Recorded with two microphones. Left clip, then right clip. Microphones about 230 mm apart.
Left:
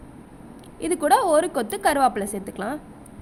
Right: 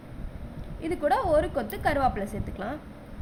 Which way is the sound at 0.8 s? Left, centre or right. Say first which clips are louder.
Left 6 dB; left.